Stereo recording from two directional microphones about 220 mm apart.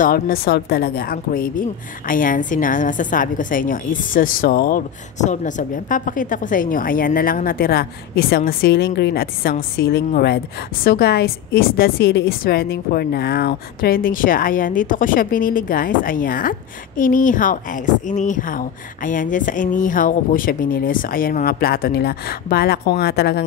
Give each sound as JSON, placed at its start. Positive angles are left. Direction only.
{"t": 0.0, "sound": "a woman's voice", "side_deg": 40}